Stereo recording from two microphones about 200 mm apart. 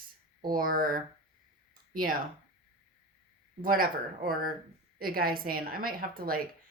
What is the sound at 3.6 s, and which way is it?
Speech, 45° right (ahead or behind).